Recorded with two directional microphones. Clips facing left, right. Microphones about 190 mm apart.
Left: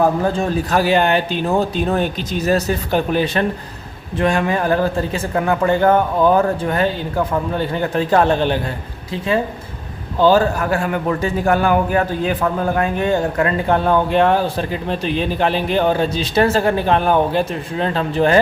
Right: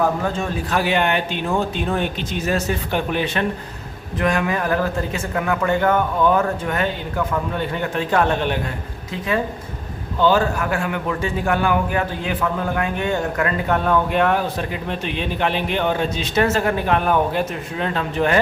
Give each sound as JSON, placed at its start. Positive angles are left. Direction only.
{"t": 0.0, "sound": "a man's voice", "side_deg": 35}